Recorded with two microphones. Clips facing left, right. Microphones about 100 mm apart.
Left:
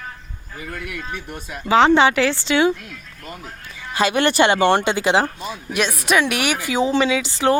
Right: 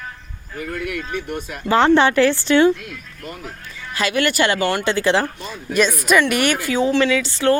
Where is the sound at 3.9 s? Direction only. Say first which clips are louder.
Left 2 dB; 25° left (ahead or behind).